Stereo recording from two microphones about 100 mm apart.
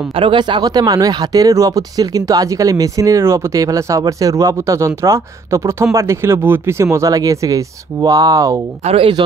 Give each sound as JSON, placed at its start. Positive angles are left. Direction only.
{"t": 0.1, "sound": "speech", "side_deg": -60}
{"t": 8.8, "sound": "speech", "side_deg": -70}